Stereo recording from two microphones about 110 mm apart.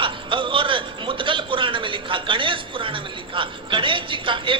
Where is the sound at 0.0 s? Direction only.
50° right (ahead or behind).